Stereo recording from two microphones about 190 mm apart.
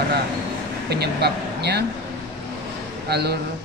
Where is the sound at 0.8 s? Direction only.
60° right (ahead or behind).